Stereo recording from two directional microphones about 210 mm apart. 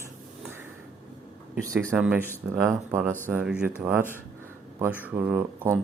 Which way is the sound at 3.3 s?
5° right (ahead or behind).